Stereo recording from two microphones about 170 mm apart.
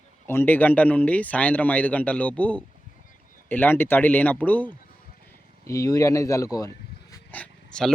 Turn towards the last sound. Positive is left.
turn(degrees=5)  # may be behind; listen again after turning